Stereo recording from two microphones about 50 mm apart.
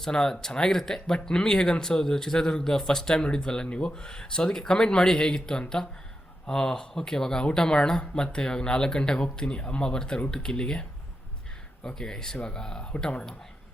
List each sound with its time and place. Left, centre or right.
0.0 s speech: centre
11.9 s speech: centre